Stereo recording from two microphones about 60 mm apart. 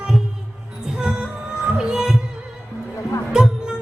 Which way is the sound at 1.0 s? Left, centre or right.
Centre.